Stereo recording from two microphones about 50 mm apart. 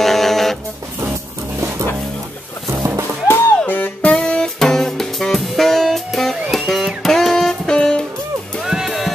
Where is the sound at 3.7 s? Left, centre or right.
Left.